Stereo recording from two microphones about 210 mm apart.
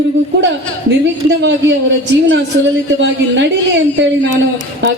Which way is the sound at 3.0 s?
60° right (ahead or behind).